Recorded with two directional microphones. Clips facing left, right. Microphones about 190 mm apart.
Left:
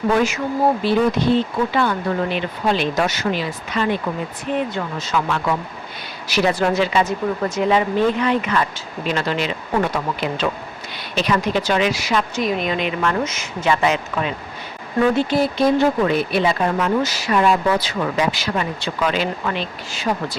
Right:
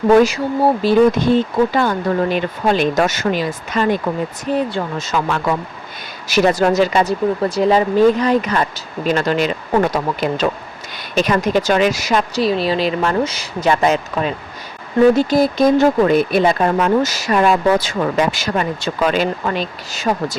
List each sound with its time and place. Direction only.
0.1 s speech: 35° right (ahead or behind)